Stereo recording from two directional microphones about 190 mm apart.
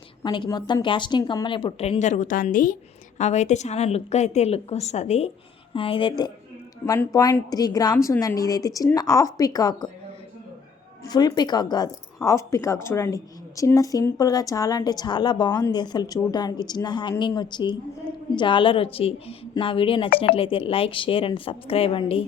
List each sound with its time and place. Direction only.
0.2 s speech: 25° left (ahead or behind)
2.0 s a woman's voice: 40° left (ahead or behind); by 9.9 s 20° left (ahead or behind)
11.1 s speech: 20° left (ahead or behind)